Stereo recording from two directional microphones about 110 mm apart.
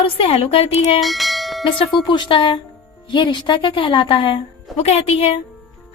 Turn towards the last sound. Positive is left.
turn(degrees=65)  # may be behind; listen again after turning